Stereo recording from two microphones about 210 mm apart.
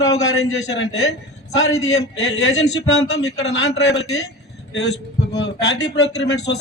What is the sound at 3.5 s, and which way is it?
A man's voice, 55° left (ahead or behind).